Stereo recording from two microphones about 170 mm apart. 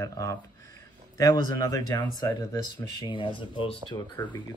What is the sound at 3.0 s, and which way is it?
Speech, 30° left (ahead or behind).